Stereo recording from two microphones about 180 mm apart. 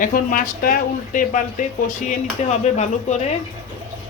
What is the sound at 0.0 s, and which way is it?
Speech, 50° left (ahead or behind).